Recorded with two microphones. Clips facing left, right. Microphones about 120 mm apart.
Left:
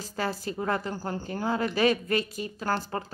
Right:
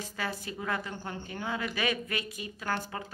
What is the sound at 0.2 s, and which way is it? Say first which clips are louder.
A woman's voice: left 6 dB; 35° left (ahead or behind).